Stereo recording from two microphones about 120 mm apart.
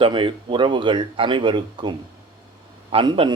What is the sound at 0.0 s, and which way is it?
A man's voice, 45° right (ahead or behind).